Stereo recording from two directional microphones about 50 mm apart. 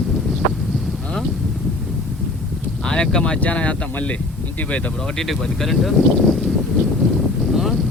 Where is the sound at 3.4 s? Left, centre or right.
Left.